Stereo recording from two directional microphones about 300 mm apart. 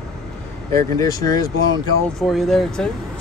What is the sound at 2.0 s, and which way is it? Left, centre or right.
Speech, centre.